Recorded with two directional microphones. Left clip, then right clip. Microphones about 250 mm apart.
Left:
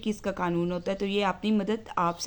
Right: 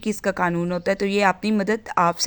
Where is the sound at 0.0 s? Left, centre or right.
Right.